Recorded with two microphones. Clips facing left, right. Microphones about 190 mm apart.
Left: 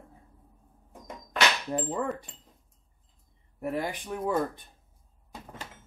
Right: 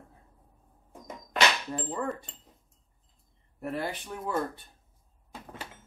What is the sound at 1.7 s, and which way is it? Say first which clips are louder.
Speech: left 3 dB; 15° left (ahead or behind).